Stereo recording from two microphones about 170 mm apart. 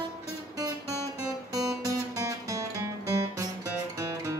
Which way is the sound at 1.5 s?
20° right (ahead or behind).